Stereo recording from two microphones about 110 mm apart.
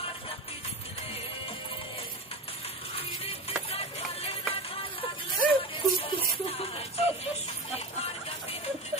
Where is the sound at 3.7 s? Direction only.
65° left (ahead or behind).